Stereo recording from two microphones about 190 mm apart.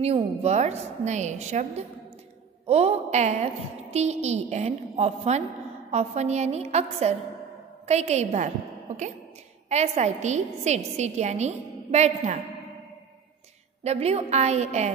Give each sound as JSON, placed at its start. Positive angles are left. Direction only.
{"t": 0.0, "sound": "a woman's voice", "side_deg": -35}
{"t": 13.8, "sound": "a woman's voice", "side_deg": -35}